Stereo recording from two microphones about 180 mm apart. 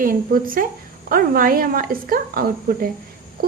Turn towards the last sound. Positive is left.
turn(degrees=-55)  # may be behind; listen again after turning